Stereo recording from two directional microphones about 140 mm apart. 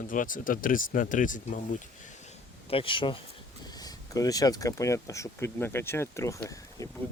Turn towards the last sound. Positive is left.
turn(degrees=20)  # may be behind; listen again after turning